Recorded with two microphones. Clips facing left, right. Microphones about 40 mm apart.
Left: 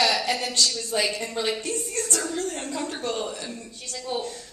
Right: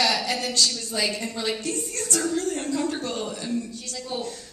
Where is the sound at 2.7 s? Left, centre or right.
Centre.